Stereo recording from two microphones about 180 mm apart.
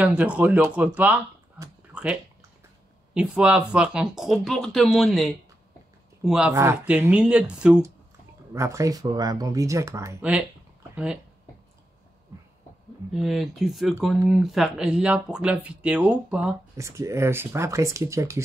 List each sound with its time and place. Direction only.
0.0 s speech: 10° right (ahead or behind)
3.2 s speech: 5° right (ahead or behind)
6.5 s speech: 15° right (ahead or behind)
8.5 s speech: 15° right (ahead or behind)
13.1 s speech: centre (ahead or behind)